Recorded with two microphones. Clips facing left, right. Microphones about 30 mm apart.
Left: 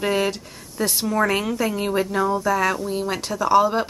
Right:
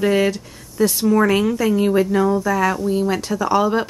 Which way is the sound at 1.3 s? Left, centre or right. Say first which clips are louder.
Right 5 dB; centre.